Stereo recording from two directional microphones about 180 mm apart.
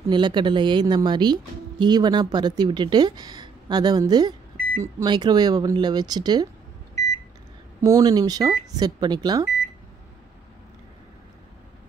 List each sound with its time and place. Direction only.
0.1 s speech: 25° right (ahead or behind)
7.8 s speech: 20° right (ahead or behind)